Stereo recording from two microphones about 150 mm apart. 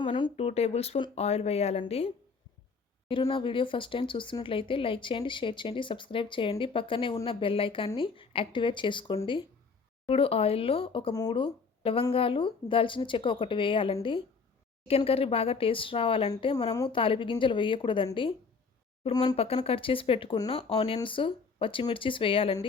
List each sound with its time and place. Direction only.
0.0 s speech: 30° left (ahead or behind)
0.3 s speech: 45° left (ahead or behind)
3.1 s speech: 35° left (ahead or behind)
11.1 s speech: 25° left (ahead or behind)
19.4 s speech: 40° left (ahead or behind)